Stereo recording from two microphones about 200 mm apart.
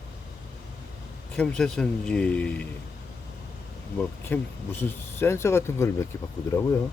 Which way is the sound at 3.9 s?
10° left (ahead or behind).